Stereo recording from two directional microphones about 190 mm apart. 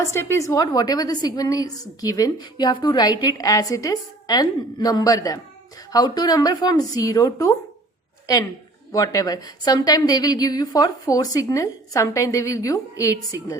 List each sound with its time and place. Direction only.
0.0 s a woman's voice: 15° left (ahead or behind)
8.9 s a woman's voice: 20° left (ahead or behind)